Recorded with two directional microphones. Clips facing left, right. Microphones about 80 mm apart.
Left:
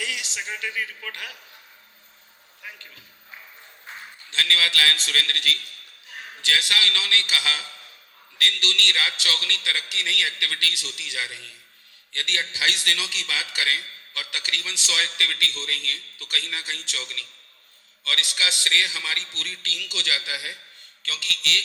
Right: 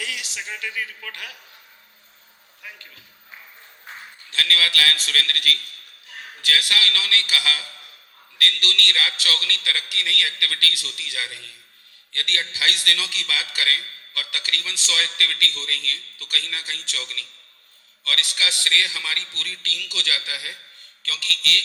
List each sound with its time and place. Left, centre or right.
0.0 s a man's voice: left
2.6 s a sound: left
4.3 s a man's voice: left